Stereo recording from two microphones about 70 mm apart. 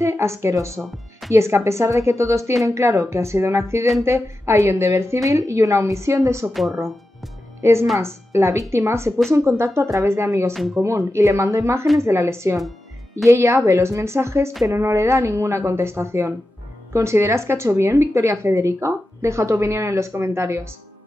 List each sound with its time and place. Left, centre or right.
0.0 s a woman's voice: right
6.5 s speech: centre
8.0 s a woman's voice: right
10.5 s speech: centre
10.8 s a woman's voice: right